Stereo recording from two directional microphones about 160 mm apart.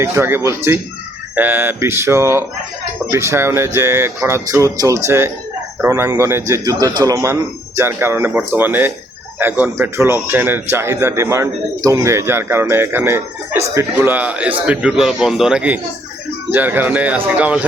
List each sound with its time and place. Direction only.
0.0 s a man's voice: 15° right (ahead or behind)